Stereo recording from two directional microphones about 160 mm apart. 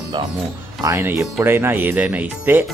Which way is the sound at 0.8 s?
15° right (ahead or behind).